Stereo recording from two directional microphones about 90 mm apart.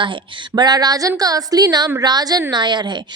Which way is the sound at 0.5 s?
50° right (ahead or behind).